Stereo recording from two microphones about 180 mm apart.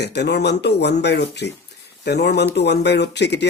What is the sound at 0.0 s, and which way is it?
Speech, 70° left (ahead or behind).